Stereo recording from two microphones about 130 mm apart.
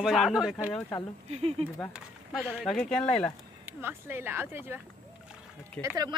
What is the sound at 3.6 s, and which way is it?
Speech, 15° right (ahead or behind).